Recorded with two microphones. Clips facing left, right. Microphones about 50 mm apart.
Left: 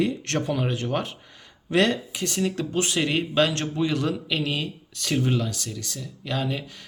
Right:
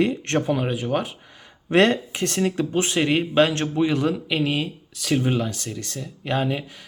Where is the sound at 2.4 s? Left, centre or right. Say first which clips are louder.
Right 3 dB; right.